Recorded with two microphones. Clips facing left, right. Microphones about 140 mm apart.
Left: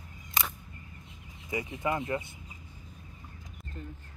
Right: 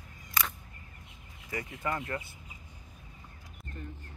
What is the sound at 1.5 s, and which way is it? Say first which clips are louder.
Speech: left 3 dB; 15° left (ahead or behind).